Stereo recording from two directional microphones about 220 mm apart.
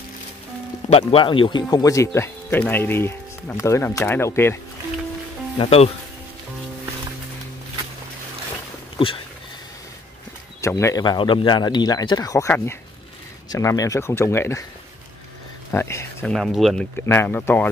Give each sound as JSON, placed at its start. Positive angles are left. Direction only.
{"t": 0.8, "sound": "speech", "side_deg": 25}
{"t": 5.6, "sound": "speech", "side_deg": 25}
{"t": 8.9, "sound": "speech", "side_deg": 25}
{"t": 10.6, "sound": "speech", "side_deg": 15}
{"t": 15.7, "sound": "speech", "side_deg": 10}
{"t": 17.0, "sound": "speech", "side_deg": 10}